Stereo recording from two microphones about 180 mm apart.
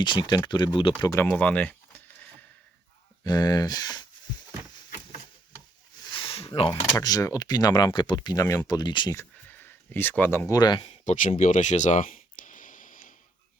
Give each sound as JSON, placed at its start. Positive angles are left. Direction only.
{"t": 0.0, "sound": "speech", "side_deg": 25}
{"t": 1.1, "sound": "speech", "side_deg": 10}
{"t": 3.2, "sound": "speech", "side_deg": 20}
{"t": 6.0, "sound": "speech", "side_deg": 25}
{"t": 9.5, "sound": "speech", "side_deg": 10}
{"t": 11.0, "sound": "a sound", "side_deg": 45}